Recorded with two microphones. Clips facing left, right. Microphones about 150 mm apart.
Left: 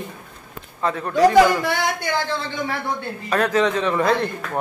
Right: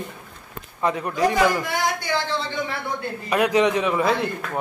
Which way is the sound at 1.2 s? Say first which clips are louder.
Left 7 dB; 75° left (ahead or behind).